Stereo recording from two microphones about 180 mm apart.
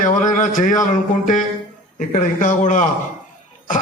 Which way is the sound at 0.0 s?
45° left (ahead or behind).